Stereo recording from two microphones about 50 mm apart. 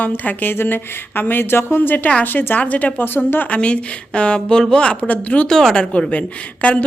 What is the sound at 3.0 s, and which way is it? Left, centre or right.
Speech, left.